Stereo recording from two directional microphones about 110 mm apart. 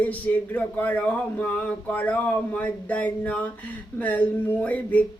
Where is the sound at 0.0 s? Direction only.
15° left (ahead or behind).